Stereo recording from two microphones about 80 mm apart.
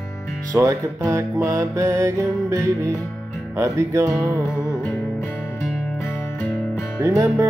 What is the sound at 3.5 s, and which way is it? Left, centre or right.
Music, right.